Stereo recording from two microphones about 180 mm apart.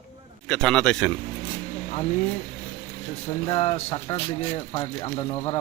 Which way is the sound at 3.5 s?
30° left (ahead or behind).